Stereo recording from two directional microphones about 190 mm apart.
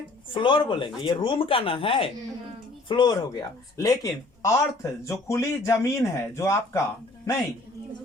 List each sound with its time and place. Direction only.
0.3 s speech: 25° left (ahead or behind)